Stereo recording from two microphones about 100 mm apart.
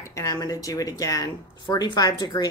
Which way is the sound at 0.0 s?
30° left (ahead or behind).